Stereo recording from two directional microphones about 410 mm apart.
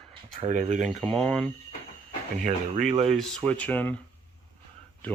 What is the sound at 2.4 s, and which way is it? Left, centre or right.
Speech, centre.